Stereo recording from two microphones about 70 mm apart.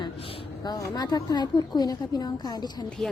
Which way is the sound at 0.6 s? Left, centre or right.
Left.